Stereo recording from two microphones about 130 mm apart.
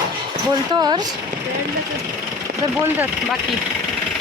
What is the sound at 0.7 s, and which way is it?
Speech, 30° right (ahead or behind).